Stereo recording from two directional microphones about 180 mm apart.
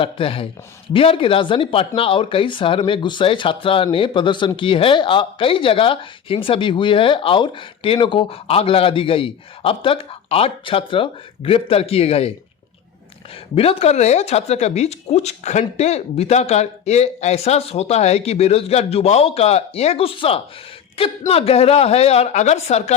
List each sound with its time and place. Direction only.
0.0 s speech: 30° left (ahead or behind)
13.6 s speech: 30° left (ahead or behind)